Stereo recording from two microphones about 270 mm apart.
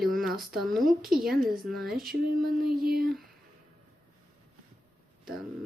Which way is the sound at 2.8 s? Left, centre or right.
Right.